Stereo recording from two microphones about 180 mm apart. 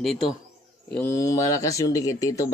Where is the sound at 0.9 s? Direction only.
10° left (ahead or behind).